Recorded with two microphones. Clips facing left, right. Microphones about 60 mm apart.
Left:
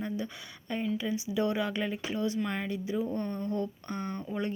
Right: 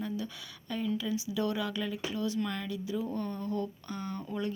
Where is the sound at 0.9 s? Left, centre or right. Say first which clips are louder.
Left 2 dB; left.